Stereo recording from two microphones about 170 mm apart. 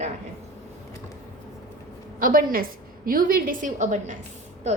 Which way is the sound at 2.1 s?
55° right (ahead or behind).